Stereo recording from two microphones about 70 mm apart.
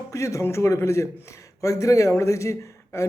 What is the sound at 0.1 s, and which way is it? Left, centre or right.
A man's voice, left.